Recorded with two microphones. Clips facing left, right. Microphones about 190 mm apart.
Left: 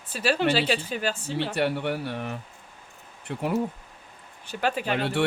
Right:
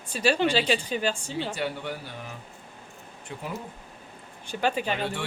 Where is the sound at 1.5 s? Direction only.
65° left (ahead or behind).